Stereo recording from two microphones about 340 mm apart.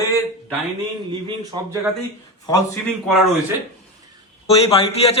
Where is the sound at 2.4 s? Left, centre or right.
Centre.